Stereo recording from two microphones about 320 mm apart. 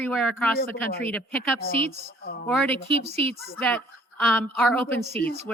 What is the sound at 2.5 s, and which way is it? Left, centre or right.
Speech, centre.